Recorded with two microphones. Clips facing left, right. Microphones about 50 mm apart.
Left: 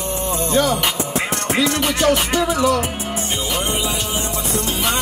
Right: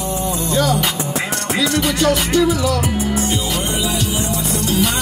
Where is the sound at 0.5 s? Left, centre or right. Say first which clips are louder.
Even; left.